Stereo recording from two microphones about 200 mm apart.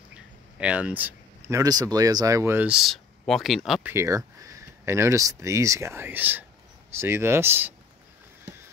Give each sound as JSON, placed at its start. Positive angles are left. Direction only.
{"t": 0.1, "sound": "a sound", "side_deg": -5}
{"t": 1.5, "sound": "speech", "side_deg": -20}
{"t": 3.9, "sound": "speech", "side_deg": -15}